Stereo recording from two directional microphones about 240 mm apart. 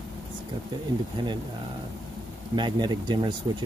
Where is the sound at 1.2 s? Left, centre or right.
Centre.